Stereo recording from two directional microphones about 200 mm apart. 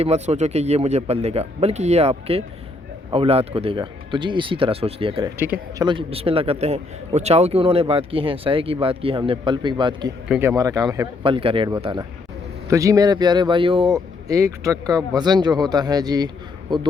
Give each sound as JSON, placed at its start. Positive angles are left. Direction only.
{"t": 0.0, "sound": "a man's voice", "side_deg": -35}
{"t": 10.2, "sound": "speech", "side_deg": -5}
{"t": 10.5, "sound": "a man's voice", "side_deg": -20}